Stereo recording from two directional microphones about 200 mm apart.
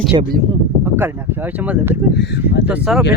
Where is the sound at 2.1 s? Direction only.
60° left (ahead or behind).